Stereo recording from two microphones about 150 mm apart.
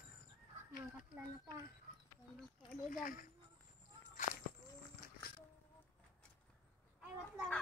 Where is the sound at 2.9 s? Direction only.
65° left (ahead or behind).